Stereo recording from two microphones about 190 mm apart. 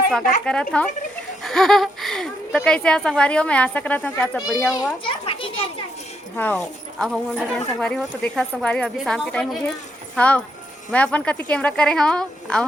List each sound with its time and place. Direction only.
0.4 s a woman's voice: 5° left (ahead or behind)
5.0 s children playing: 30° left (ahead or behind)
6.3 s a child's voice: 10° left (ahead or behind)